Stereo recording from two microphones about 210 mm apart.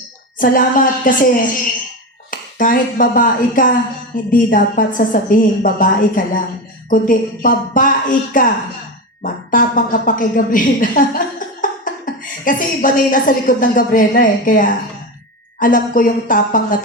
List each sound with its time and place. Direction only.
0.3 s a woman's voice: 40° left (ahead or behind)